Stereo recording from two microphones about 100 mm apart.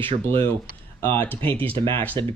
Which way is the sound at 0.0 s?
65° right (ahead or behind).